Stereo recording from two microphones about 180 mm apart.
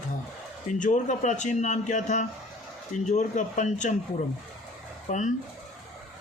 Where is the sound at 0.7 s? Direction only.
45° left (ahead or behind).